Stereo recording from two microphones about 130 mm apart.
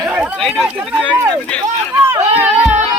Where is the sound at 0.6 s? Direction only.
15° right (ahead or behind).